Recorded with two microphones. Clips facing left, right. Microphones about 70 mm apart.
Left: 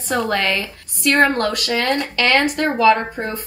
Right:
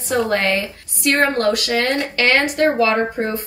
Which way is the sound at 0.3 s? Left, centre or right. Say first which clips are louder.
Right 1 dB; right.